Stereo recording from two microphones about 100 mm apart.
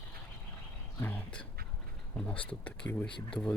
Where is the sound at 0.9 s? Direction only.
20° left (ahead or behind).